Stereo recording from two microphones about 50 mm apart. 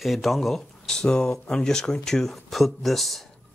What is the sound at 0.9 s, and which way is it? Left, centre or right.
Speech, centre.